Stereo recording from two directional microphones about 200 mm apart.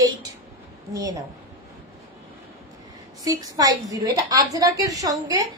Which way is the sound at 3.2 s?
20° right (ahead or behind).